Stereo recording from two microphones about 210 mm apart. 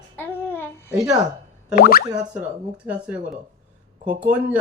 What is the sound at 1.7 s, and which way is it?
Speech, 45° left (ahead or behind).